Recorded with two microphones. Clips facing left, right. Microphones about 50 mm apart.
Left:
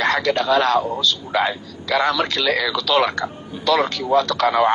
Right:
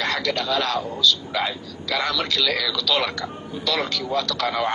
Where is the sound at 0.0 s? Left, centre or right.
Left.